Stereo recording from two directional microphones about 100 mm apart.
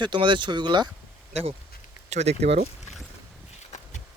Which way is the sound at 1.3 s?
90° right.